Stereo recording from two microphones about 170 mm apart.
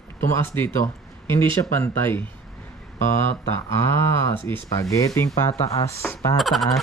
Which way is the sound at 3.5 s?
15° left (ahead or behind).